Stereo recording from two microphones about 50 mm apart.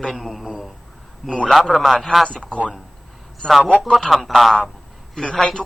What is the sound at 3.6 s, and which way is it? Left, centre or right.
Speech, right.